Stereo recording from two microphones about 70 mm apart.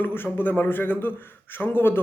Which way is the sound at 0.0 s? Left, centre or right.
Left.